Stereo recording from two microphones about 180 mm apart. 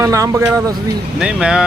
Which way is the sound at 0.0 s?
20° right (ahead or behind).